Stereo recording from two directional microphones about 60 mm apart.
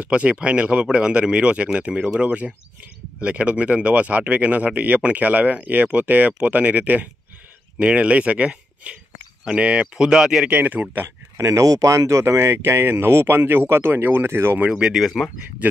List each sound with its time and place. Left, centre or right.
0.0 s speech: right; by 10.5 s centre
10.5 s speech: right
11.3 s speech: right
14.7 s speech: centre
15.0 s speech: centre
15.6 s speech: right